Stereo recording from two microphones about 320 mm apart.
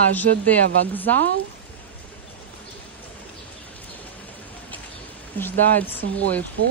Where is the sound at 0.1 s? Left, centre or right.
Centre.